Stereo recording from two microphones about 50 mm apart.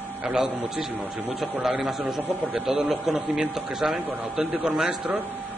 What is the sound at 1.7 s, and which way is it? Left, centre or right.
A man's voice, centre.